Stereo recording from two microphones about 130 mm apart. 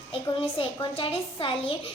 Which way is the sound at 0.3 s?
45° left (ahead or behind).